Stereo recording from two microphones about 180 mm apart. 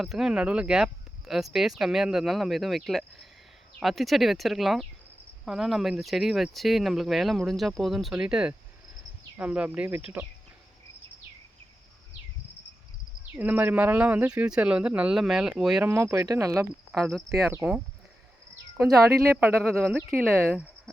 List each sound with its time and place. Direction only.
0.0 s speech: centre (ahead or behind)
13.3 s speech: 10° right (ahead or behind)
15.9 s speech: 15° right (ahead or behind)
16.9 s speech: centre (ahead or behind)
19.1 s speech: 15° right (ahead or behind)
20.5 s a sound: 5° left (ahead or behind)